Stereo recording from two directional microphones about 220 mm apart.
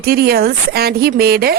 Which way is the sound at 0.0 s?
45° right (ahead or behind).